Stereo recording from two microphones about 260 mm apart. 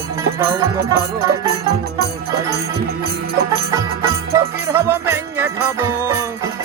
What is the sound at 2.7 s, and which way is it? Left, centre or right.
Music, right.